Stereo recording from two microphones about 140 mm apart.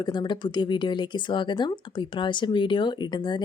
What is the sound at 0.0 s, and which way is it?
Speech, 30° left (ahead or behind).